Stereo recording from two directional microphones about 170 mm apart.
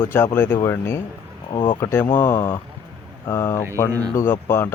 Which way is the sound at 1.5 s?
30° left (ahead or behind).